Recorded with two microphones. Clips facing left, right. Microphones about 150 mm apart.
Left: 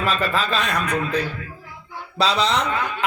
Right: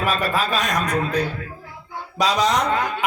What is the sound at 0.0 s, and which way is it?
Speech, 10° right (ahead or behind).